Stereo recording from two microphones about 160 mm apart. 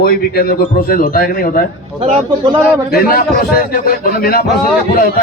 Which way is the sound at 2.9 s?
65° left (ahead or behind).